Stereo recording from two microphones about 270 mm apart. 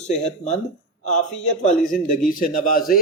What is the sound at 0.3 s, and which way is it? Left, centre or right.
A man's voice, left.